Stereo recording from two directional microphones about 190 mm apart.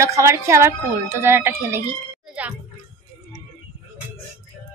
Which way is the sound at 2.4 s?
5° right (ahead or behind).